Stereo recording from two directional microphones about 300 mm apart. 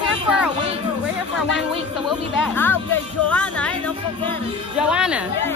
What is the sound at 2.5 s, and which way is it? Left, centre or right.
Music, centre.